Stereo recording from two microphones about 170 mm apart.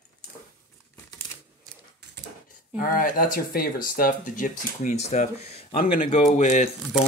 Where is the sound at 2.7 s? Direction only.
50° left (ahead or behind).